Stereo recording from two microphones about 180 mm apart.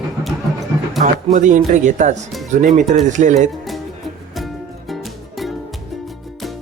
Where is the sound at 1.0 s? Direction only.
45° right (ahead or behind).